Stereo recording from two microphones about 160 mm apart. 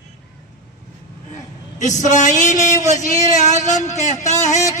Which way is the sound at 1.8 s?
50° left (ahead or behind).